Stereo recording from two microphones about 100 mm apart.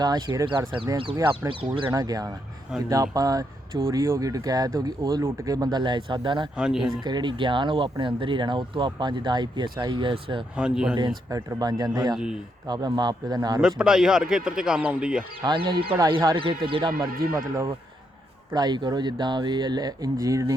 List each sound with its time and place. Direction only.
0.0 s speech: 45° right (ahead or behind)
1.9 s speech: 40° right (ahead or behind); by 6.5 s 55° right (ahead or behind)
6.6 s speech: 5° right (ahead or behind)
7.0 s speech: 50° right (ahead or behind)
10.6 s speech: 5° right (ahead or behind)
11.3 s speech: 35° right (ahead or behind)
11.8 s speech: 45° right (ahead or behind)
12.1 s speech: 5° right (ahead or behind)
12.6 s speech: 45° right (ahead or behind)
13.6 s speech: 5° right (ahead or behind)
15.4 s speech: 55° right (ahead or behind)
17.3 s speech: 30° right (ahead or behind)
18.5 s speech: 45° right (ahead or behind)